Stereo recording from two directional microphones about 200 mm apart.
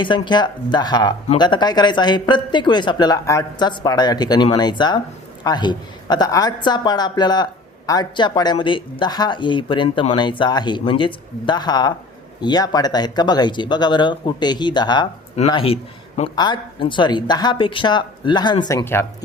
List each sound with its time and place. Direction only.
0.0 s speech: 25° left (ahead or behind)